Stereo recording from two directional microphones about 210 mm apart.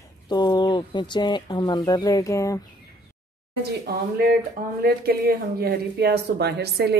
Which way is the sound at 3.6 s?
45° right (ahead or behind).